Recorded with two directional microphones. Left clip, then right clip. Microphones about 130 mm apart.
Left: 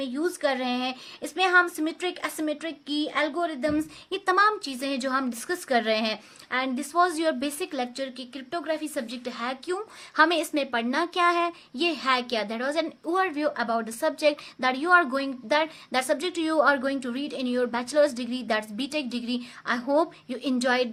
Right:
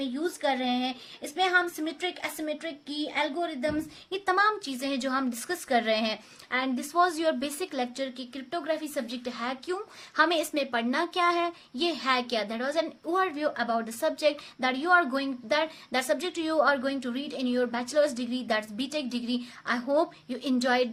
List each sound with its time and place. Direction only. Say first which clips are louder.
0.0 s speech: left 3 dB; 45° left (ahead or behind); by 20.9 s 30° left (ahead or behind)